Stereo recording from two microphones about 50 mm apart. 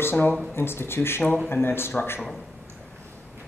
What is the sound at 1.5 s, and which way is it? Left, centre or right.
Speech, left.